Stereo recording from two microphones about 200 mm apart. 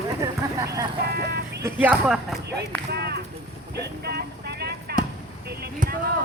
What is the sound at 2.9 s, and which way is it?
Speech, 55° right (ahead or behind).